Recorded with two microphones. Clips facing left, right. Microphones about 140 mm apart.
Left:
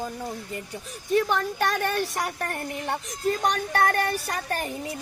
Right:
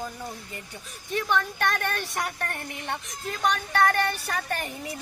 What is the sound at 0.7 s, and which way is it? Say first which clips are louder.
Speech: left 8 dB; 35° left (ahead or behind).